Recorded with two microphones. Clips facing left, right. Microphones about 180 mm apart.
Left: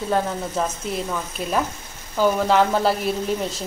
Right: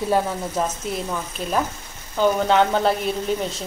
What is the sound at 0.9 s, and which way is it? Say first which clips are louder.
A woman's voice: even; centre (ahead or behind).